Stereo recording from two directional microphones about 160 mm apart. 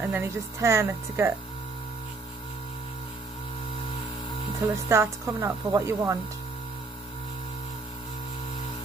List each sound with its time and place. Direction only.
0.0 s speech: 15° right (ahead or behind)
4.8 s speech: 15° right (ahead or behind)